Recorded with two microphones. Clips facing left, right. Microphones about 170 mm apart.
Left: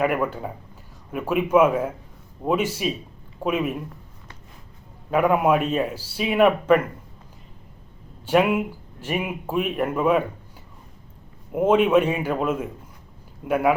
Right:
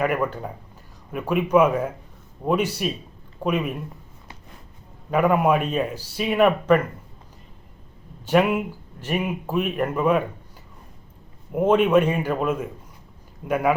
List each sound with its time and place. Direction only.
0.0 s a man's voice: 5° left (ahead or behind)
5.1 s a man's voice: centre (ahead or behind)
8.3 s speech: 5° left (ahead or behind)
11.5 s a man's voice: 5° left (ahead or behind)